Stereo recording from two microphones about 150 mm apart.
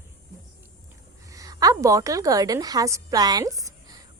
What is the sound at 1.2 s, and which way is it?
A woman's voice, 20° right (ahead or behind).